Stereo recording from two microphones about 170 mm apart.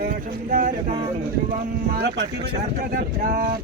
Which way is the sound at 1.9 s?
70° right (ahead or behind).